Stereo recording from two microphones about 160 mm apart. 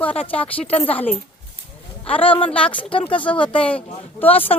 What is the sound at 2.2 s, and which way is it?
Speech, 35° left (ahead or behind).